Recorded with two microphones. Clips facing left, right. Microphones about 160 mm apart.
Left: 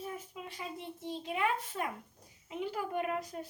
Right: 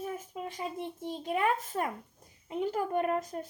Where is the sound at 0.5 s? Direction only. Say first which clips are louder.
Right 4 dB; 45° right (ahead or behind).